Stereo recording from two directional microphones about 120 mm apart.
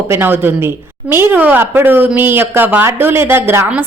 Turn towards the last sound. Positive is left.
turn(degrees=-20)  # may be behind; listen again after turning